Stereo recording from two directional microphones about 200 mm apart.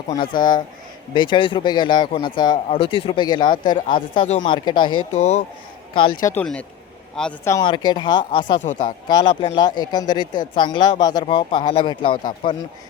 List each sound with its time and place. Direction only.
0.1 s speech: 20° left (ahead or behind)
5.1 s a man's voice: 35° left (ahead or behind)
6.2 s speech: 5° left (ahead or behind)
7.5 s speech: 20° left (ahead or behind)